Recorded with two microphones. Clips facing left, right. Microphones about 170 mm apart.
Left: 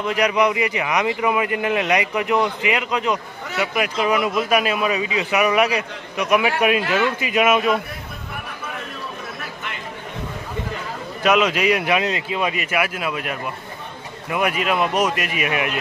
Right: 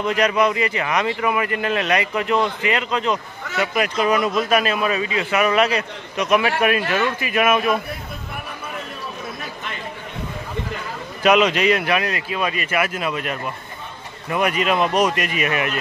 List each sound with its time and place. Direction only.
0.0 s speech: 10° left (ahead or behind)
11.2 s speech: centre (ahead or behind)